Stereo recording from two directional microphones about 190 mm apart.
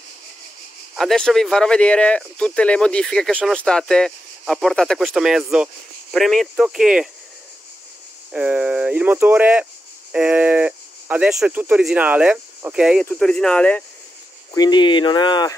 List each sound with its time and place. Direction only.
0.9 s speech: centre (ahead or behind)
8.3 s speech: 5° right (ahead or behind)
14.5 s speech: 20° left (ahead or behind)